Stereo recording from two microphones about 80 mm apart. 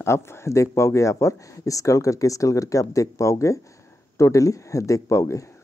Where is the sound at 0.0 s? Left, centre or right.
Left.